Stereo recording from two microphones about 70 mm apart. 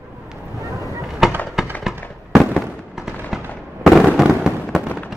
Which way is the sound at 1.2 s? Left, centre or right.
Centre.